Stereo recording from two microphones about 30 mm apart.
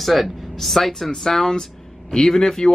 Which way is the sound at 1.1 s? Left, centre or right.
Centre.